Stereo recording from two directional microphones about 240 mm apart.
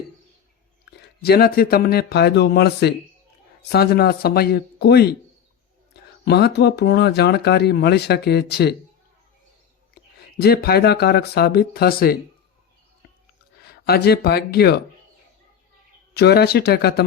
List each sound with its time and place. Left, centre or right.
1.2 s speech: left
10.4 s speech: left
13.8 s speech: left
16.1 s speech: left